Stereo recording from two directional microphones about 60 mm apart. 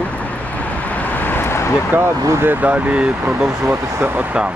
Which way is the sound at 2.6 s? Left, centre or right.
Right.